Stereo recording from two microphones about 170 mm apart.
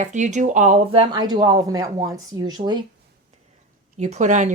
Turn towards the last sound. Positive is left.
turn(degrees=-45)  # may be behind; listen again after turning